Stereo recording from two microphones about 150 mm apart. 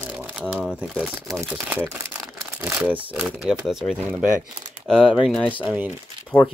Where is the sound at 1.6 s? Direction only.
15° right (ahead or behind).